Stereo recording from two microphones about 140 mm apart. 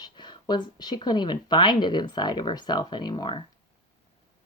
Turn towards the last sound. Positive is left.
turn(degrees=35)  # may be behind; listen again after turning